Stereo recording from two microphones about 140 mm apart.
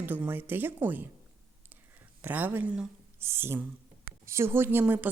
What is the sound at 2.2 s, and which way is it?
Speech, 15° right (ahead or behind).